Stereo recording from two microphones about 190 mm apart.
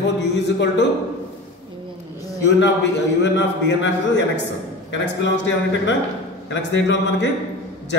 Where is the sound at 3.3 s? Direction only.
65° left (ahead or behind).